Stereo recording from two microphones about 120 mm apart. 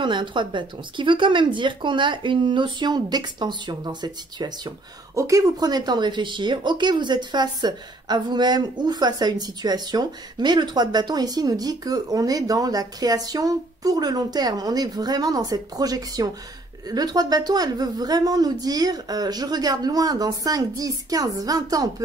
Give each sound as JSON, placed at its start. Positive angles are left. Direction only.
{"t": 0.0, "sound": "speech", "side_deg": -40}